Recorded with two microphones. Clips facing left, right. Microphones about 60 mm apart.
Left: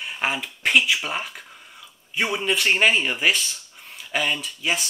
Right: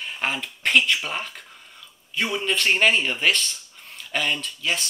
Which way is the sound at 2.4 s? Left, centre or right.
Centre.